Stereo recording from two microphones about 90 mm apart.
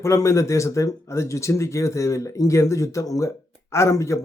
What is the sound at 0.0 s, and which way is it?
Speech, 35° left (ahead or behind).